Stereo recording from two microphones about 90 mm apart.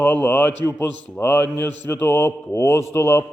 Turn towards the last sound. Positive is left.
turn(degrees=30)  # may be behind; listen again after turning